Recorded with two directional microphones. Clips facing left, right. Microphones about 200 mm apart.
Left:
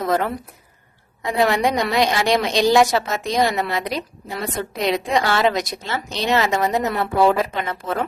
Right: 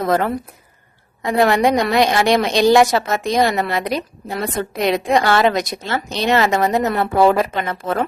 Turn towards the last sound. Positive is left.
turn(degrees=-55)  # may be behind; listen again after turning